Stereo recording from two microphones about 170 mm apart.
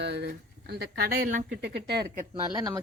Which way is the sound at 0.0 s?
80° right.